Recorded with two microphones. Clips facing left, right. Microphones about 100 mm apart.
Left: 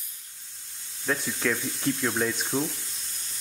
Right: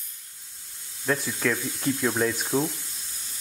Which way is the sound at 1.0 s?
Centre (ahead or behind).